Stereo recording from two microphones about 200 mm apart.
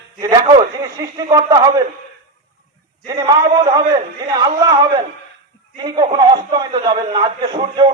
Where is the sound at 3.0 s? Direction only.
20° right (ahead or behind).